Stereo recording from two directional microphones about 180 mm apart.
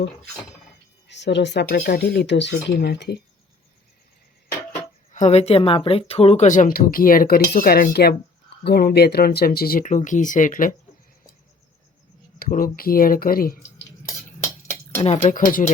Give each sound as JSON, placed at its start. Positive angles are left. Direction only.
{"t": 1.0, "sound": "speech", "side_deg": 75}
{"t": 5.1, "sound": "speech", "side_deg": 40}
{"t": 12.4, "sound": "speech", "side_deg": 50}
{"t": 15.0, "sound": "speech", "side_deg": 35}